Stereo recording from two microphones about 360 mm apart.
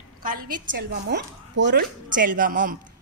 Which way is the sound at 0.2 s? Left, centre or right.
Right.